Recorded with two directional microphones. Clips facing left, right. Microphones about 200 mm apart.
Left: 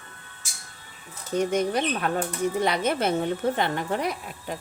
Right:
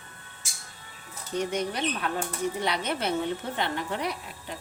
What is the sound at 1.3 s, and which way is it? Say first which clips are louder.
Speech: left 5 dB; 50° left (ahead or behind).